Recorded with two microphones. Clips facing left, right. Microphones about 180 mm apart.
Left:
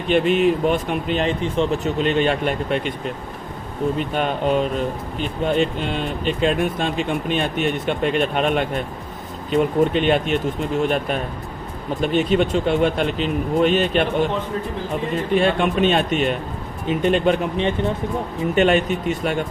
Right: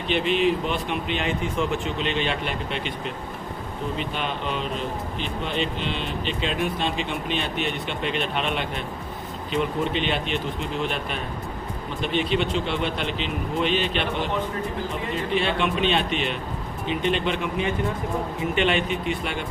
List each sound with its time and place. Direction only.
0.1 s speech: 50° left (ahead or behind); by 1.8 s 30° left (ahead or behind)
1.8 s speech: 45° left (ahead or behind)
3.9 s speech: 45° left (ahead or behind)
15.3 s speech: 45° left (ahead or behind)
18.5 s speech: 45° left (ahead or behind)